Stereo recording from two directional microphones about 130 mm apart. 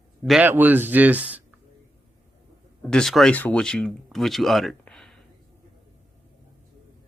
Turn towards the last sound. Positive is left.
turn(degrees=5)  # may be behind; listen again after turning